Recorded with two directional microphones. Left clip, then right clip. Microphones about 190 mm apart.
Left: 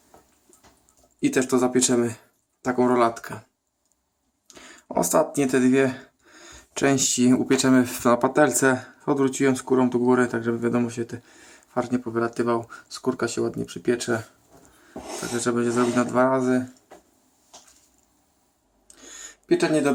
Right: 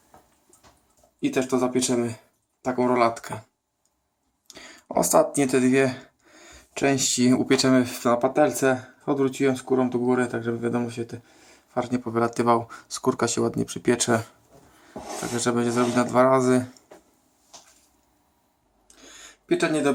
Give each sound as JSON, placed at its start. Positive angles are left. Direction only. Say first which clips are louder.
{"t": 1.2, "sound": "speech", "louder": "left 2 dB", "side_deg": 15}
{"t": 4.4, "sound": "speech", "louder": "right 1 dB", "side_deg": 0}
{"t": 15.3, "sound": "speech", "louder": "even", "side_deg": -5}
{"t": 18.9, "sound": "a sound", "louder": "left 3 dB", "side_deg": 20}